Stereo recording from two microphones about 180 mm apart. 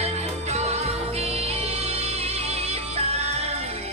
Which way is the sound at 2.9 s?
35° right (ahead or behind).